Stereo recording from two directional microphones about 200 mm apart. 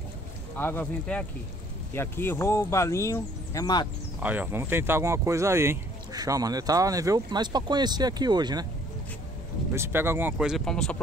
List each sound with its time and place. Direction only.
0.6 s speech: 10° left (ahead or behind)
4.2 s speech: 10° right (ahead or behind)
9.7 s speech: 10° right (ahead or behind)